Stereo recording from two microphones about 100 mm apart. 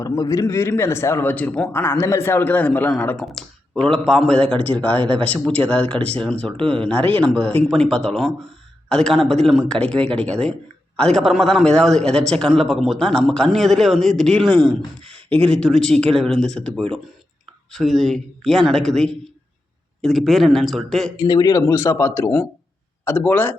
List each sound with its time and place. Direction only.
0.0 s a man's voice: 35° left (ahead or behind); by 1.7 s 15° left (ahead or behind)
1.7 s a man's voice: 25° left (ahead or behind)
3.2 s a man's voice: 5° left (ahead or behind)
21.2 s a man's voice: 40° left (ahead or behind); by 23.6 s 20° left (ahead or behind)